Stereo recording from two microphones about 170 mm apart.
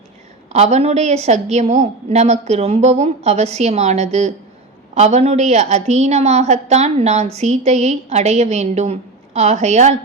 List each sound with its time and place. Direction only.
0.5 s a woman's voice: 40° right (ahead or behind)